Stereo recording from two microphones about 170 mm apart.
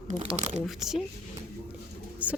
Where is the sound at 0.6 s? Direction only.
Centre (ahead or behind).